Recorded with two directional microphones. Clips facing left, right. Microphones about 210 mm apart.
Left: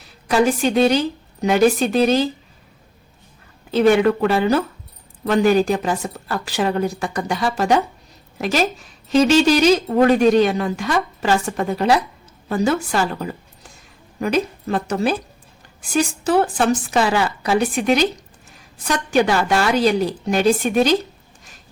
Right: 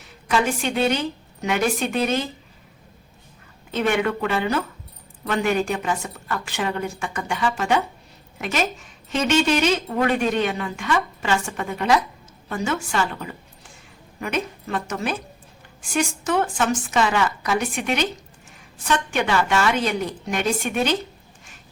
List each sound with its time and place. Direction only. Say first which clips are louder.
0.0 s a woman's voice: left 5 dB; 35° left (ahead or behind)
3.7 s speech: left 8 dB; 35° left (ahead or behind)